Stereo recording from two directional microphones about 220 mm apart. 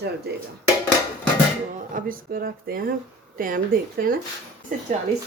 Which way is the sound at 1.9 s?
40° right (ahead or behind).